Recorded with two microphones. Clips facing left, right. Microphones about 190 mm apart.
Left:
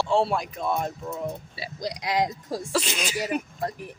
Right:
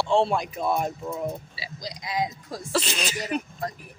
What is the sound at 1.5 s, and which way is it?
Speech, 55° left (ahead or behind).